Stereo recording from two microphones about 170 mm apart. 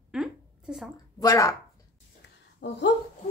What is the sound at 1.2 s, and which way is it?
Speech, 20° left (ahead or behind).